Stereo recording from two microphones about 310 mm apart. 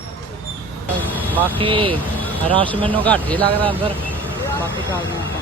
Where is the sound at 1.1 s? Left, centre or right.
Centre.